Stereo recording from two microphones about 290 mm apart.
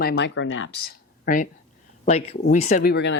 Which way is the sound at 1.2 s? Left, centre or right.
Left.